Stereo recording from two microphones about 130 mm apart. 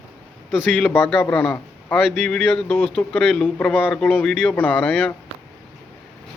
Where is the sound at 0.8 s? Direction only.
5° left (ahead or behind).